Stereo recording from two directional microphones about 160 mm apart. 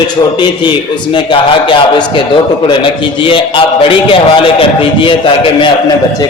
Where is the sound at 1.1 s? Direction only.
30° left (ahead or behind).